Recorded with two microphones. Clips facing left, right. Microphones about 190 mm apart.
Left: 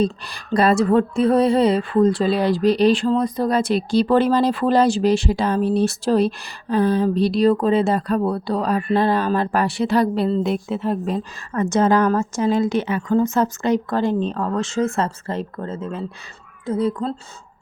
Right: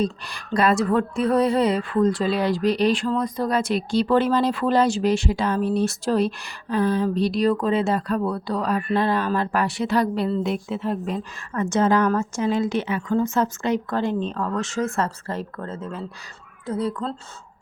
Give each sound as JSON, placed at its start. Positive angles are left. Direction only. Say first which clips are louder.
{"t": 0.0, "sound": "a woman's voice", "louder": "left 4 dB", "side_deg": 35}